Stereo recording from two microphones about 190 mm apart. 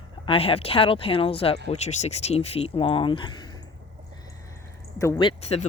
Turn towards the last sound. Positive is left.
turn(degrees=35)  # may be behind; listen again after turning